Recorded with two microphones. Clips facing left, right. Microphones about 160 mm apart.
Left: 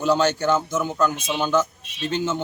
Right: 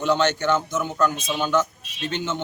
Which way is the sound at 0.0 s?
5° left (ahead or behind).